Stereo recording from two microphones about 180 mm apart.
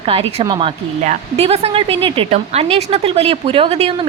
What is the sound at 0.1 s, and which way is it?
Speech, 30° right (ahead or behind).